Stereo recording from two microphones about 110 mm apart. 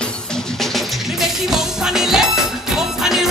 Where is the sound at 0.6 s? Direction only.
Centre (ahead or behind).